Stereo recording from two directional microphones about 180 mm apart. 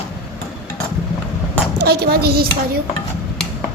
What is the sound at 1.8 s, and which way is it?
Speech, 60° right (ahead or behind).